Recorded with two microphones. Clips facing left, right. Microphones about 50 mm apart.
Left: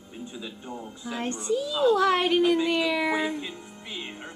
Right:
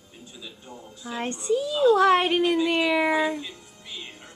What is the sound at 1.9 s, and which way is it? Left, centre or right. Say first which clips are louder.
A woman's voice: right 3 dB; centre.